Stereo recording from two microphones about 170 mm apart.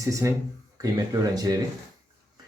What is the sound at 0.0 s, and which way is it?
Speech, 20° right (ahead or behind).